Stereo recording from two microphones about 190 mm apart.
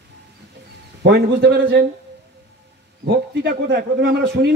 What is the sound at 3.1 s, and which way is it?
A man's voice, 65° right (ahead or behind).